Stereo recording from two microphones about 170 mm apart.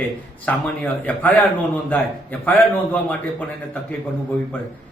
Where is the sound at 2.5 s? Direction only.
10° left (ahead or behind).